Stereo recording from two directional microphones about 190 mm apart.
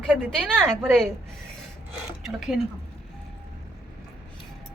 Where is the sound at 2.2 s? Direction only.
Centre (ahead or behind).